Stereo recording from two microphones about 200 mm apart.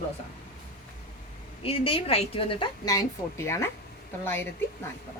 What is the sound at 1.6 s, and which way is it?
A woman's voice, 25° left (ahead or behind).